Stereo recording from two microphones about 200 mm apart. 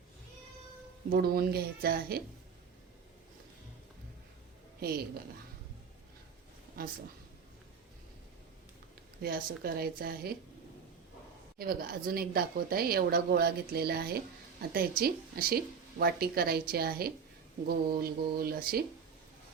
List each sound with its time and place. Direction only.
1.1 s speech: 50° right (ahead or behind)
4.8 s a woman's voice: 50° right (ahead or behind)
9.2 s speech: 50° right (ahead or behind)
11.5 s speech: 50° right (ahead or behind)